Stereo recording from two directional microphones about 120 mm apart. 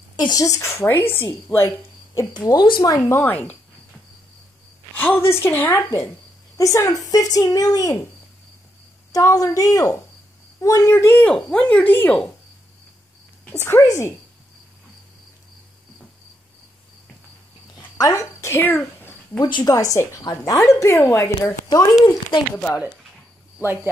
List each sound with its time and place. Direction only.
0.1 s a woman's voice: 35° left (ahead or behind); by 1.7 s 20° left (ahead or behind)
2.3 s a woman's voice: 35° left (ahead or behind); by 3.5 s 15° left (ahead or behind)
4.9 s a woman's voice: 15° left (ahead or behind)
6.5 s a woman's voice: 25° left (ahead or behind)
9.1 s a woman's voice: 30° left (ahead or behind); by 12.3 s 10° left (ahead or behind)
13.5 s a woman's voice: 20° left (ahead or behind)
17.7 s a sound: 30° left (ahead or behind)
19.4 s a woman's voice: 35° left (ahead or behind)
22.6 s a woman's voice: 15° left (ahead or behind)
23.6 s speech: 20° right (ahead or behind)